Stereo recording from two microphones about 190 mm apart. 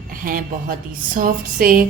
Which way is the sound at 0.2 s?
50° right (ahead or behind).